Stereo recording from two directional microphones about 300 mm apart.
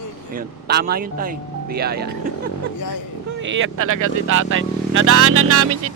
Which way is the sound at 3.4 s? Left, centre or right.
Right.